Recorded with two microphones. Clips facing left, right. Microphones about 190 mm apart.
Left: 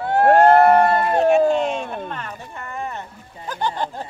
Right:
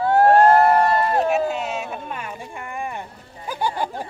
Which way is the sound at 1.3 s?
5° right (ahead or behind).